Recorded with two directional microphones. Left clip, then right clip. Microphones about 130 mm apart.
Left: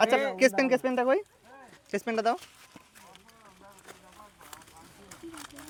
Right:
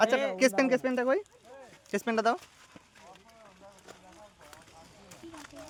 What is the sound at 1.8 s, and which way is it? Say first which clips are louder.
Speech: even; 20° right (ahead or behind).